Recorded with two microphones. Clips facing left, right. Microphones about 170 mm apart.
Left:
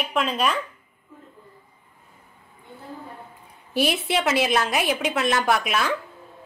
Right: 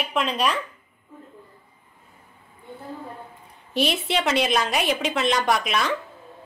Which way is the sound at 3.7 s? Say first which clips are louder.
Left 1 dB; centre (ahead or behind).